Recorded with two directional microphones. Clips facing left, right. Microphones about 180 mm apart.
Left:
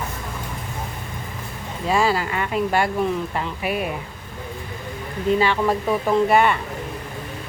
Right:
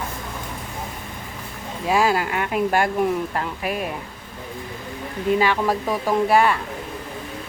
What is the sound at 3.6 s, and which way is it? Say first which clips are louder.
Speech: left 3 dB; 5° left (ahead or behind).